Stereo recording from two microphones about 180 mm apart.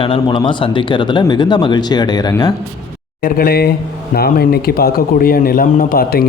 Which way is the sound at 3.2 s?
55° left (ahead or behind).